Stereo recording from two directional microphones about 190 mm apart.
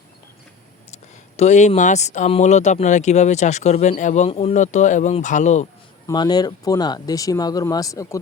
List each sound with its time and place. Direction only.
1.4 s speech: 35° left (ahead or behind)
6.1 s speech: 20° left (ahead or behind)